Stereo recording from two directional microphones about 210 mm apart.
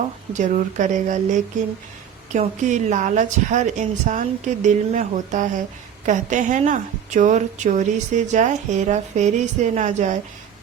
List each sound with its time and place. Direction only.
0.3 s a woman's voice: 35° right (ahead or behind)
2.3 s a woman's voice: 35° right (ahead or behind)